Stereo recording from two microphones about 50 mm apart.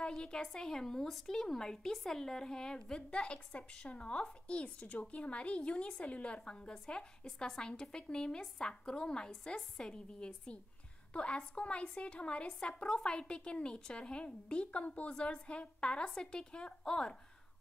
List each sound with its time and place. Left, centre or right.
0.2 s a woman's voice: centre